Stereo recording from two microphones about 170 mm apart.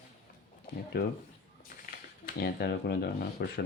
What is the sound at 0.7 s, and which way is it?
Speech, 65° left (ahead or behind).